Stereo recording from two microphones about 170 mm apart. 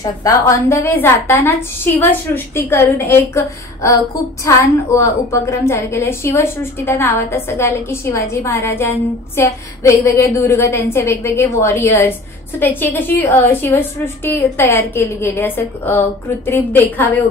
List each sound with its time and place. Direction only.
0.0 s a woman's voice: 20° left (ahead or behind)